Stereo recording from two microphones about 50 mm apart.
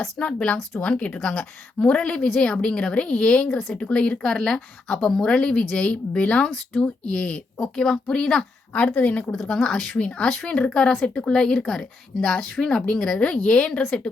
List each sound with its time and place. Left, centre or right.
0.2 s a woman's voice: left
7.6 s a woman's voice: centre
9.0 s a woman's voice: left
9.3 s a woman's voice: centre